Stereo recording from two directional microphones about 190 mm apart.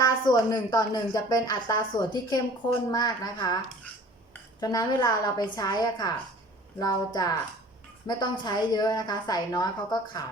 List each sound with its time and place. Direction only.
0.0 s speech: 20° left (ahead or behind)
4.6 s speech: 20° left (ahead or behind)